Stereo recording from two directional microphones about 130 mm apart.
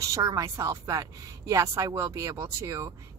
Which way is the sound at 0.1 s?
25° right (ahead or behind).